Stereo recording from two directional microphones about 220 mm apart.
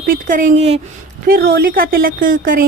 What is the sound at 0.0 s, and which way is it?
A woman's voice, 40° right (ahead or behind).